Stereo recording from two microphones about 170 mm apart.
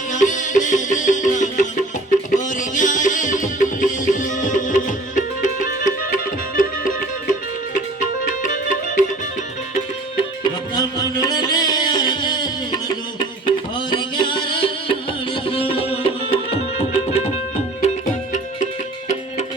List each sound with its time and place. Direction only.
0.1 s music: 45° left (ahead or behind)
10.4 s music: 25° left (ahead or behind)
15.5 s tabla: 35° left (ahead or behind)
17.8 s music: 45° left (ahead or behind)